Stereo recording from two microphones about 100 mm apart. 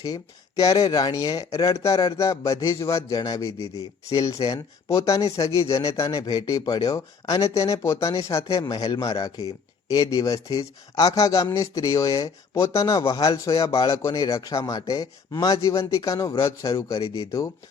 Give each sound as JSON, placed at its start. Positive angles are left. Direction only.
{"t": 0.0, "sound": "speech", "side_deg": 35}
{"t": 8.6, "sound": "speech", "side_deg": 45}